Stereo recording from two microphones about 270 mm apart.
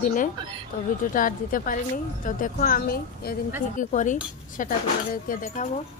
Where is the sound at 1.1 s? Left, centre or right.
Left.